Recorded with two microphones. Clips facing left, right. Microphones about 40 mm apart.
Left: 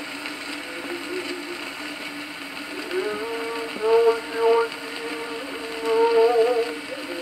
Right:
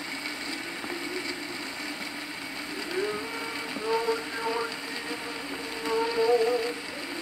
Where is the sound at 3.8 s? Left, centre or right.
Left.